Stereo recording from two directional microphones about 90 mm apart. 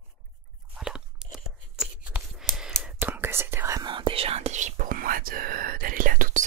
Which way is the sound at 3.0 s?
25° right (ahead or behind).